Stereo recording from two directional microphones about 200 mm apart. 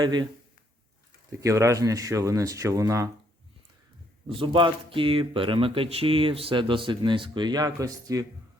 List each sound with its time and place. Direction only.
0.0 s speech: 20° right (ahead or behind)
1.3 s speech: 15° right (ahead or behind)
4.3 s speech: 25° right (ahead or behind)